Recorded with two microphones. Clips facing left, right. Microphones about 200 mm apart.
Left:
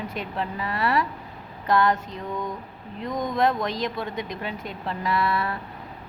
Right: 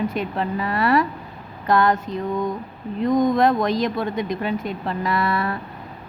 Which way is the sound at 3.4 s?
45° right (ahead or behind).